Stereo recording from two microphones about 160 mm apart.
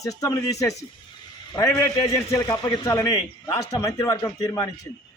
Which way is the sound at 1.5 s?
20° left (ahead or behind).